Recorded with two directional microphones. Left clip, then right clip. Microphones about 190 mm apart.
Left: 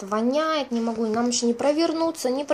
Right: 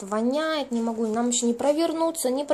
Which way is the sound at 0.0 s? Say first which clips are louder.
Left 2 dB; centre (ahead or behind).